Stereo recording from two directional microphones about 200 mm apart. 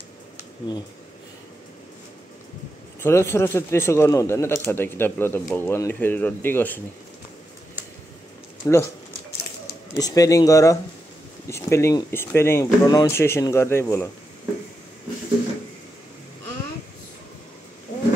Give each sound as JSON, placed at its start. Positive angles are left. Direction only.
{"t": 3.0, "sound": "speech", "side_deg": 10}
{"t": 8.6, "sound": "speech", "side_deg": 15}
{"t": 9.9, "sound": "speech", "side_deg": 15}